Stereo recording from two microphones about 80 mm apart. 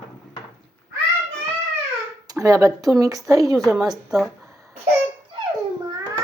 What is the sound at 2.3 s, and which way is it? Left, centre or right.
A woman's voice, right.